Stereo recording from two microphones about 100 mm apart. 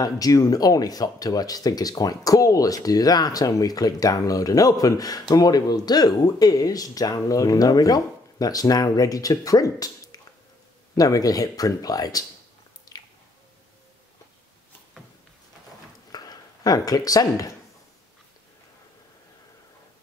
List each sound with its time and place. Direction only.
0.0 s speech: 40° left (ahead or behind)
12.9 s squish: 40° left (ahead or behind)
16.1 s a sound: 40° left (ahead or behind)